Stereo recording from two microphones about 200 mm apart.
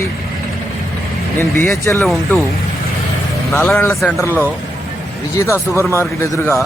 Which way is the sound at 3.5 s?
5° left (ahead or behind).